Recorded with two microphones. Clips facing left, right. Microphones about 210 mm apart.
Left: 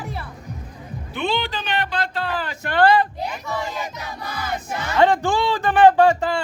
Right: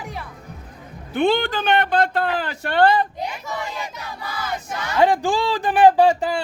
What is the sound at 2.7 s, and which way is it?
Speech, 20° right (ahead or behind).